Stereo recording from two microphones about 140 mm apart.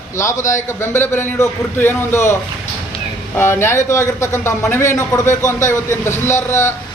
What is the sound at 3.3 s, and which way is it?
A man's voice, 15° left (ahead or behind).